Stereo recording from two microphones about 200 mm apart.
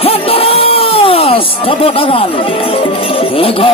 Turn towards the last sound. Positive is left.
turn(degrees=30)  # may be behind; listen again after turning